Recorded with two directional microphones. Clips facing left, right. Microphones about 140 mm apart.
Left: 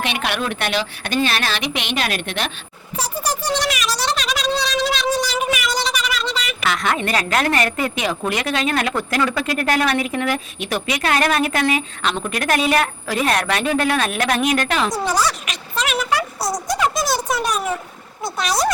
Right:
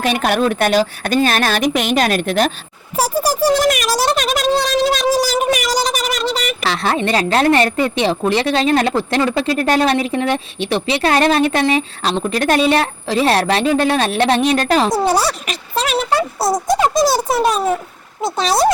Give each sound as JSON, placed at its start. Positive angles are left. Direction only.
{"t": 0.0, "sound": "speech", "side_deg": -40}
{"t": 3.5, "sound": "speech", "side_deg": -50}
{"t": 18.4, "sound": "speech", "side_deg": -35}